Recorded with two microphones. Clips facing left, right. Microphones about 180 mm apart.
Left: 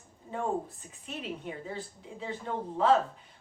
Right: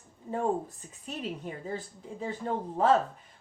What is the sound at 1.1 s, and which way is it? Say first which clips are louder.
A woman's voice: right 2 dB; 40° right (ahead or behind).